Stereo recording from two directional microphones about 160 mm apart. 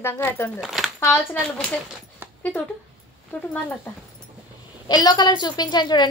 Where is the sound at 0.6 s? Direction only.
Centre (ahead or behind).